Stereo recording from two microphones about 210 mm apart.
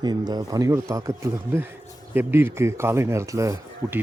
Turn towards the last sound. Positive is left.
turn(degrees=-15)  # may be behind; listen again after turning